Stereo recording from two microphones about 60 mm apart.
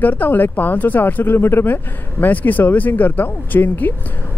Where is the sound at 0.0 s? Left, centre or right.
Left.